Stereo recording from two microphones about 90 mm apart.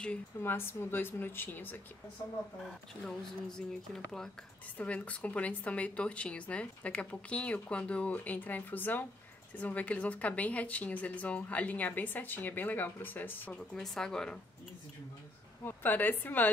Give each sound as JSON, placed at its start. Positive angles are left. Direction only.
{"t": 0.4, "sound": "speech", "side_deg": 25}
{"t": 2.6, "sound": "speech", "side_deg": 5}
{"t": 13.7, "sound": "speech", "side_deg": 5}
{"t": 15.6, "sound": "speech", "side_deg": 20}